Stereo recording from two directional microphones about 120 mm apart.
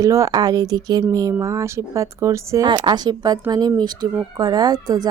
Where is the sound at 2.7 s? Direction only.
35° right (ahead or behind).